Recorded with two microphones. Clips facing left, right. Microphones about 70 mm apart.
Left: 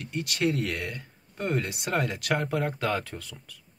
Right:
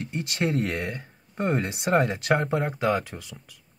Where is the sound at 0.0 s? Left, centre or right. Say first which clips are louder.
Even; right.